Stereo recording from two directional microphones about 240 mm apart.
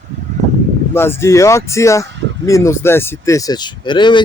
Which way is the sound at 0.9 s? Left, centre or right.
Centre.